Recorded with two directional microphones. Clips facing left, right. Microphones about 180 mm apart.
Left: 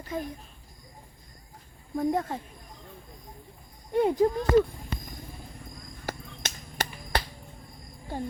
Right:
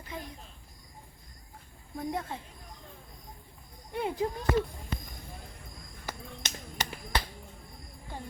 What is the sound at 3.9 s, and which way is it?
Speech, 40° left (ahead or behind).